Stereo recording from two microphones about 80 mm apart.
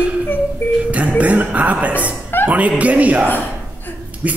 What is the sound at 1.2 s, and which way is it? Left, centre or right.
Speech, centre.